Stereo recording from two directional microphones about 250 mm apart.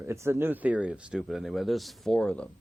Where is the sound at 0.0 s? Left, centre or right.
Centre.